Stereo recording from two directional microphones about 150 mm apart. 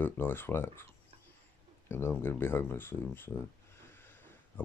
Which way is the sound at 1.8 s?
15° left (ahead or behind).